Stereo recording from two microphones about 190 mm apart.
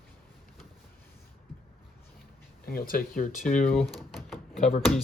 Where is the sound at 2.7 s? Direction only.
50° left (ahead or behind).